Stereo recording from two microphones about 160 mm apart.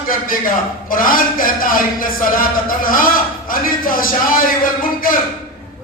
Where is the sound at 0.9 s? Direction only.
60° left (ahead or behind).